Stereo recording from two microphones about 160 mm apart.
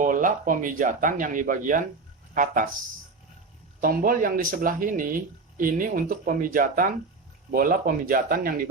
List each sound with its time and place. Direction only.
0.0 s speech: 55° right (ahead or behind)
3.8 s speech: 60° right (ahead or behind)